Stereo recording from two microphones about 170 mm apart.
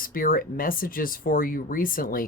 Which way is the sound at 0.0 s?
55° left (ahead or behind).